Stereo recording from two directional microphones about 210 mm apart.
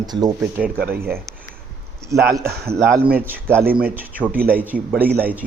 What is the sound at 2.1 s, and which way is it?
A man's voice, 15° right (ahead or behind).